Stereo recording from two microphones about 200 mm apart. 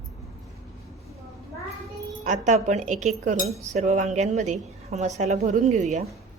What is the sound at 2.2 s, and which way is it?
A woman's voice, 35° right (ahead or behind).